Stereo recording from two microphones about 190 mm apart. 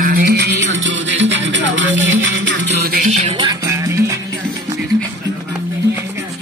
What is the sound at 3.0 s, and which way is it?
Music, 40° right (ahead or behind).